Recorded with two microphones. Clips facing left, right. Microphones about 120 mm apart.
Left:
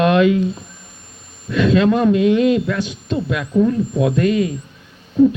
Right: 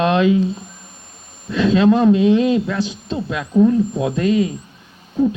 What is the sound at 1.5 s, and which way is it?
A man's voice, 25° right (ahead or behind).